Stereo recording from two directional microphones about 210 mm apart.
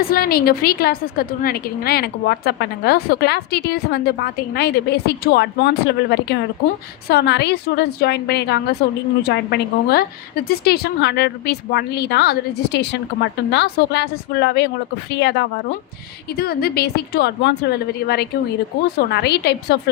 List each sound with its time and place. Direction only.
0.1 s a woman's voice: 45° left (ahead or behind)